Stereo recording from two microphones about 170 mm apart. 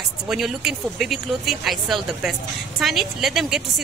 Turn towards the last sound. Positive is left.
turn(degrees=0)  # may be behind; listen again after turning